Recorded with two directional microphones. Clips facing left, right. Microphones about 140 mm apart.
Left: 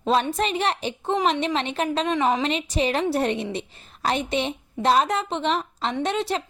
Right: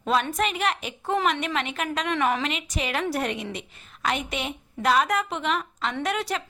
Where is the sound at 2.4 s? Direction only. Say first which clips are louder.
Left 6 dB; 30° left (ahead or behind).